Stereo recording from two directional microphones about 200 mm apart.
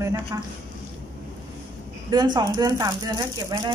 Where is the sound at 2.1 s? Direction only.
20° right (ahead or behind).